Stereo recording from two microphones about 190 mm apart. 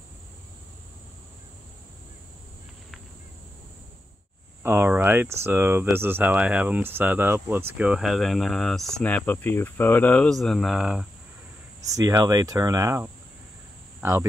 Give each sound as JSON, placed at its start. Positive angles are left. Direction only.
{"t": 4.6, "sound": "speech", "side_deg": -10}
{"t": 11.8, "sound": "speech", "side_deg": -15}